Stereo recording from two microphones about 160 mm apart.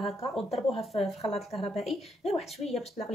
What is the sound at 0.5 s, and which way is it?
Speech, 40° left (ahead or behind).